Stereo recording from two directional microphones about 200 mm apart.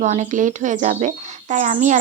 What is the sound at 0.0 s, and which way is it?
Speech, 35° right (ahead or behind).